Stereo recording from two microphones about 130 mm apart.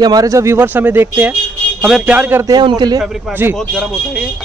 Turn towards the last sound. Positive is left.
turn(degrees=0)  # may be behind; listen again after turning